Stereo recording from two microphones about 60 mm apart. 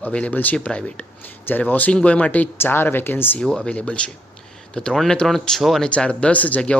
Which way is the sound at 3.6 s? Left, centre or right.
Centre.